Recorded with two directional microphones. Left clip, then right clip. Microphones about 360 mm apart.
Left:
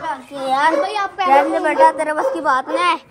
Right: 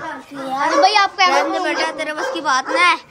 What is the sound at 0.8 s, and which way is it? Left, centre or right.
Speech, centre.